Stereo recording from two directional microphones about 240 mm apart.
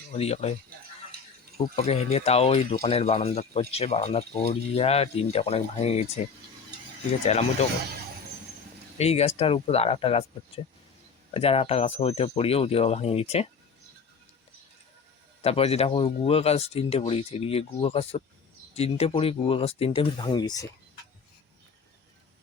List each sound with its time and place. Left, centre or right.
0.1 s speech: left
1.5 s speech: left
7.3 s speech: left
9.0 s speech: left
15.4 s speech: left